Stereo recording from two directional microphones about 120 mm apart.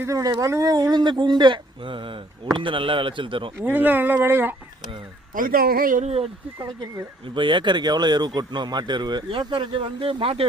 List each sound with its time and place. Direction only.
0.0 s speech: 30° right (ahead or behind); by 3.5 s 45° right (ahead or behind)
3.6 s speech: 15° right (ahead or behind)
5.9 s speech: 65° right (ahead or behind)
7.3 s speech: 40° right (ahead or behind)